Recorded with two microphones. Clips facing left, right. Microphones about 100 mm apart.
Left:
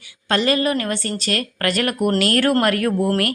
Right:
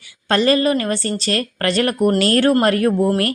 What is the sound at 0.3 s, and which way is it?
A woman's voice, 35° right (ahead or behind).